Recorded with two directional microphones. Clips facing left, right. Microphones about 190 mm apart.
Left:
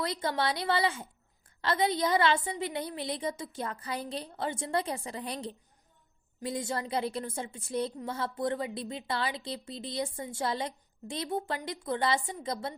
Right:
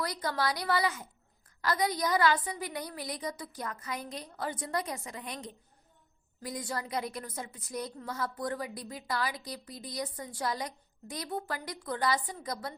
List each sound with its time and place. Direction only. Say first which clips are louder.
0.0 s a woman's voice: left 2 dB; 25° left (ahead or behind)